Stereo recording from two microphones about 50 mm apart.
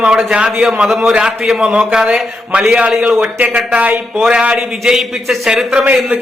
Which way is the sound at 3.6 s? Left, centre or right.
Right.